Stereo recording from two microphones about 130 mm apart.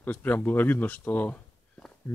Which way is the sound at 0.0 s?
15° left (ahead or behind).